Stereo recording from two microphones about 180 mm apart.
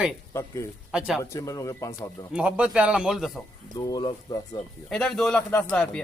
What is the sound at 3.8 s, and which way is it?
Speech, 20° left (ahead or behind).